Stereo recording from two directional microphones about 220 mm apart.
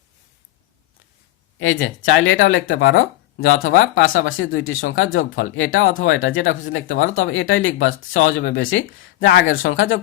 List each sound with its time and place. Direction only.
1.5 s speech: 60° left (ahead or behind)